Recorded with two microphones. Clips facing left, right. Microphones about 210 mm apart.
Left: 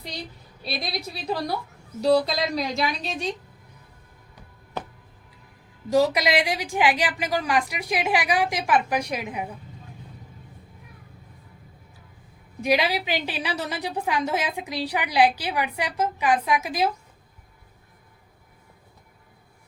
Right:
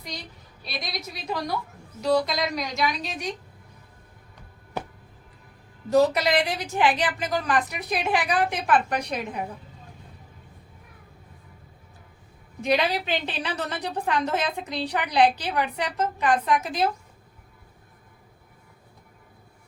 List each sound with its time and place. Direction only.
0.6 s a woman's voice: 30° left (ahead or behind)
5.9 s a woman's voice: 10° left (ahead or behind)
12.6 s a woman's voice: 10° left (ahead or behind)